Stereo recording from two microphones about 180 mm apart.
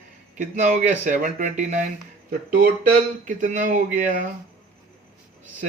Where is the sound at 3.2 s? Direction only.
45° right (ahead or behind).